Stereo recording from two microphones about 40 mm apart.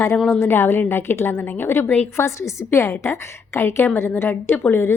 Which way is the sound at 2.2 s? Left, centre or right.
Left.